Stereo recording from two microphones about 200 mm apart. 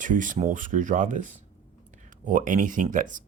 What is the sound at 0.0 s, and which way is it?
Speech, 40° right (ahead or behind).